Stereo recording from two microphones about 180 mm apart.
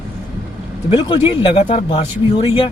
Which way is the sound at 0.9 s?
25° left (ahead or behind).